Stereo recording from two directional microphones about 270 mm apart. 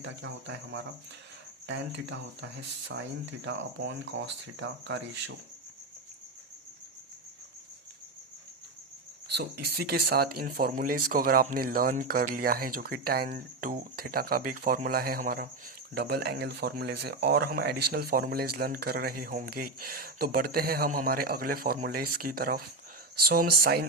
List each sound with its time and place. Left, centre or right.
0.0 s speech: right
9.3 s speech: right